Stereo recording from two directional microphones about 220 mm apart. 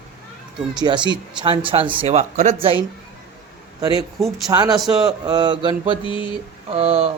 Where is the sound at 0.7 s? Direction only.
20° right (ahead or behind).